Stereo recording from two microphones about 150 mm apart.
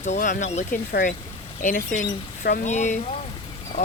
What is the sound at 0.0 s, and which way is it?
Speech, 55° left (ahead or behind).